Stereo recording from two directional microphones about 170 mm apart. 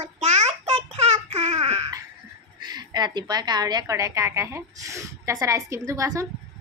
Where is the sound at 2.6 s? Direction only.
25° right (ahead or behind).